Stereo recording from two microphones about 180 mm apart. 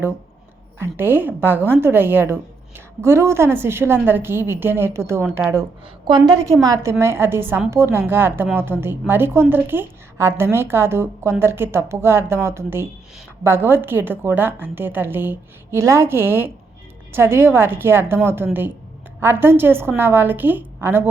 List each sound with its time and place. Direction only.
0.8 s a woman's voice: 10° right (ahead or behind)